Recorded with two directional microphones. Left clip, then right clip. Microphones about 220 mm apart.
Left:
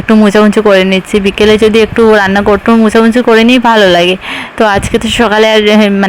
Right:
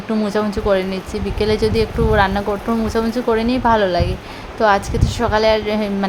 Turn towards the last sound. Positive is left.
turn(degrees=30)  # may be behind; listen again after turning